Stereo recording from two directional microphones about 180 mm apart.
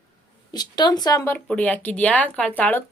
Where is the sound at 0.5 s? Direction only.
25° left (ahead or behind).